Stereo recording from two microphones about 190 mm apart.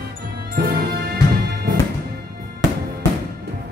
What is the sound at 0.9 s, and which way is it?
Music, 55° right (ahead or behind).